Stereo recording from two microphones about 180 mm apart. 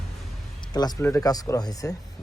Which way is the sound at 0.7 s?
20° left (ahead or behind).